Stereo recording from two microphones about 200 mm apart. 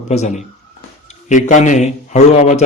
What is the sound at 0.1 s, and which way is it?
A man's voice, 35° left (ahead or behind).